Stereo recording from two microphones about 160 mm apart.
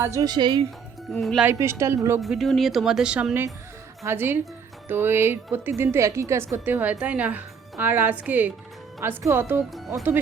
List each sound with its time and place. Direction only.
0.0 s speech: 20° right (ahead or behind)
1.2 s speech: centre (ahead or behind)
1.5 s a woman's voice: 15° right (ahead or behind)
2.2 s a woman's voice: centre (ahead or behind)